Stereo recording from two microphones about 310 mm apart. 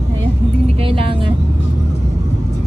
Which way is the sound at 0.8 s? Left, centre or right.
Centre.